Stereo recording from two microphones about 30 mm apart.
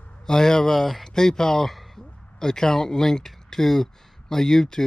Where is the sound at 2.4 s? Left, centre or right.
Centre.